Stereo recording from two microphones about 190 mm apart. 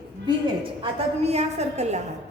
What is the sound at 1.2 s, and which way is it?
Speech, 35° right (ahead or behind).